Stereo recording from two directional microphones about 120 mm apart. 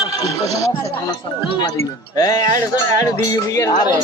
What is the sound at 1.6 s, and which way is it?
Speech, 30° left (ahead or behind).